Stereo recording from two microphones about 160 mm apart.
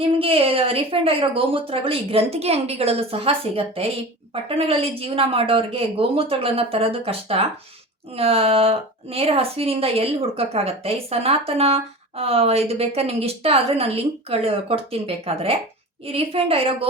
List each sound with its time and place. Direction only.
0.0 s a woman's voice: 35° right (ahead or behind)